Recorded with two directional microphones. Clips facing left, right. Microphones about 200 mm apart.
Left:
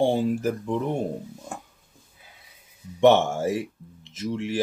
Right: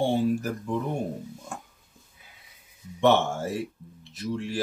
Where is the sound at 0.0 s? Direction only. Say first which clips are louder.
Left 2 dB; 20° left (ahead or behind).